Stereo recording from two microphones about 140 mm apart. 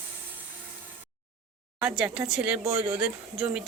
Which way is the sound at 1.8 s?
5° right (ahead or behind).